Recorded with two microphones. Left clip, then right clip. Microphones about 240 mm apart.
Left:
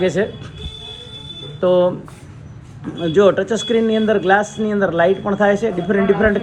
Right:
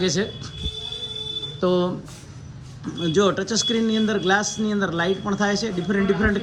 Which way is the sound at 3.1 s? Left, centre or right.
Right.